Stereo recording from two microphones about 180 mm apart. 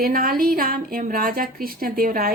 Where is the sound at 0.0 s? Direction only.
55° right (ahead or behind).